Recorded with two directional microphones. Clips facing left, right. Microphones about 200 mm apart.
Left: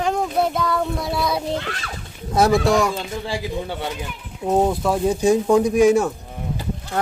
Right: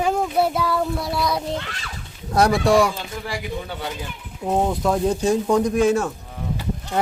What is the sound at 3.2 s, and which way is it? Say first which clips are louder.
Speech: left 3 dB; 25° left (ahead or behind).